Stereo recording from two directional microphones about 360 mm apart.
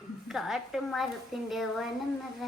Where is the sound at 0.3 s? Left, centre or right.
Centre.